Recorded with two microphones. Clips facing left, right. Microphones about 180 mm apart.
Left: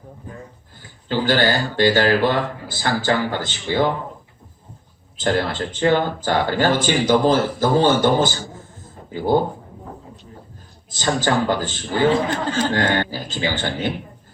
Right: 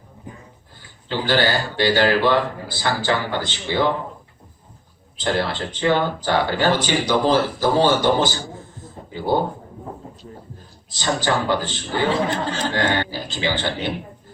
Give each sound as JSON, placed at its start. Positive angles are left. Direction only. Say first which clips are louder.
{"t": 1.0, "sound": "speech", "louder": "left 2 dB", "side_deg": 45}
{"t": 5.1, "sound": "speech", "louder": "left 2 dB", "side_deg": 45}
{"t": 10.9, "sound": "speech", "louder": "left 2 dB", "side_deg": 45}